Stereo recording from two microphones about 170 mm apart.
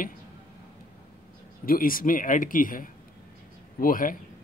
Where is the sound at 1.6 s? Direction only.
55° left (ahead or behind).